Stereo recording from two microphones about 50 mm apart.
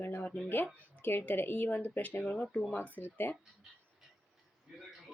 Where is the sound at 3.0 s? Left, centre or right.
Left.